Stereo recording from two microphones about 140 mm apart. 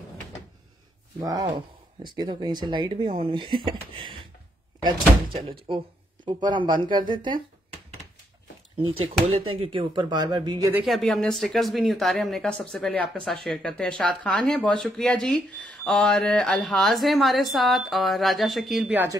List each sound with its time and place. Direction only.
1.2 s speech: 25° right (ahead or behind)
9.0 s speech: 45° right (ahead or behind)
10.9 s speech: 5° left (ahead or behind)